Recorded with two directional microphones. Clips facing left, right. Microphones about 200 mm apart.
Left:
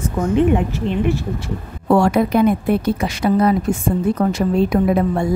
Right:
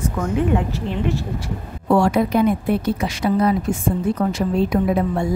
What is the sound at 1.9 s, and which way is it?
A woman's voice, 55° left (ahead or behind).